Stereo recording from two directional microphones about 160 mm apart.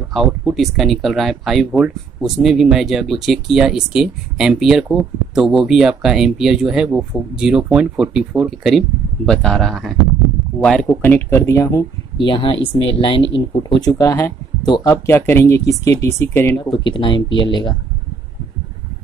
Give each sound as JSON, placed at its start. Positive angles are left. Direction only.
{"t": 0.1, "sound": "speech", "side_deg": 0}
{"t": 16.7, "sound": "speech", "side_deg": 30}